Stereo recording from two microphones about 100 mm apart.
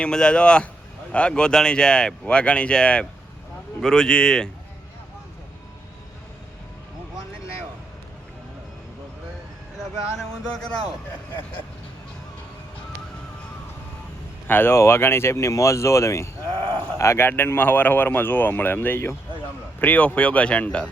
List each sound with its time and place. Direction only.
0.0 s speech: 10° left (ahead or behind)
10.2 s speech: 5° left (ahead or behind)
14.4 s speech: 20° left (ahead or behind)